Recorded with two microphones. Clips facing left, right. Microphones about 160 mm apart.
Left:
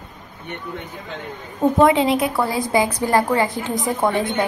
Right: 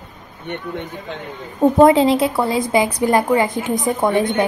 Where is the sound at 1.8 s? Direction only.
35° right (ahead or behind); by 4.3 s 20° right (ahead or behind).